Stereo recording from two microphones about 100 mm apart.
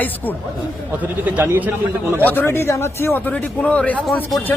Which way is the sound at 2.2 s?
20° left (ahead or behind).